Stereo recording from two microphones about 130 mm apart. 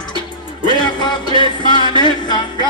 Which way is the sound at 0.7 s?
35° left (ahead or behind).